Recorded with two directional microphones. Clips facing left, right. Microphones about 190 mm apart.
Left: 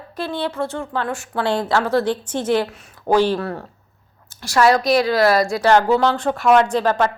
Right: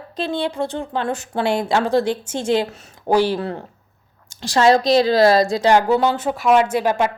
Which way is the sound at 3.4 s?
25° right (ahead or behind).